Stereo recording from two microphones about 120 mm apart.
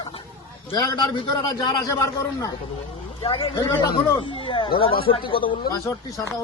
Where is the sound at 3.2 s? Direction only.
50° left (ahead or behind).